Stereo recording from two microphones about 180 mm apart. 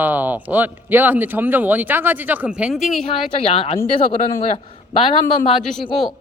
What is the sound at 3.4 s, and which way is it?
Speech, 30° left (ahead or behind).